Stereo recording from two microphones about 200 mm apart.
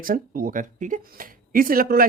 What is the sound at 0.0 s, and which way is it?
Speech, 45° right (ahead or behind).